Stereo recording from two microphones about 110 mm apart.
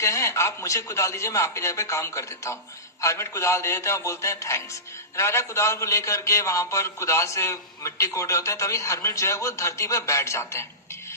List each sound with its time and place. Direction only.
0.0 s a man's voice: 25° left (ahead or behind)